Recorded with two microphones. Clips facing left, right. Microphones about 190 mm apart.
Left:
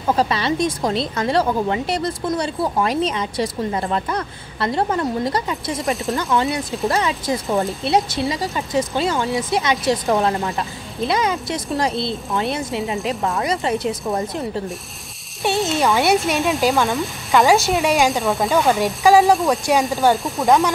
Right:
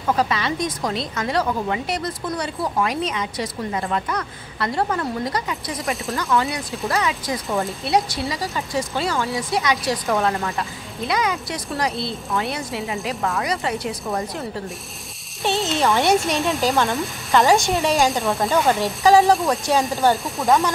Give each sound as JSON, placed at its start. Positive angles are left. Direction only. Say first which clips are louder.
{"t": 0.0, "sound": "speech", "louder": "left 2 dB", "side_deg": 30}
{"t": 6.2, "sound": "speech", "louder": "even", "side_deg": 20}
{"t": 7.0, "sound": "speech", "louder": "left 3 dB", "side_deg": 30}
{"t": 10.6, "sound": "speech", "louder": "left 4 dB", "side_deg": 30}
{"t": 15.7, "sound": "speech", "louder": "even", "side_deg": 0}